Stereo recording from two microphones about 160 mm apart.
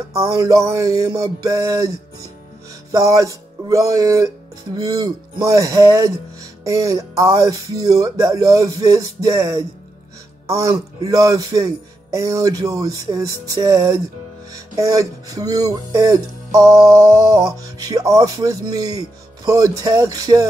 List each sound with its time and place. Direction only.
0.1 s music: 20° right (ahead or behind)
2.9 s music: 20° right (ahead or behind)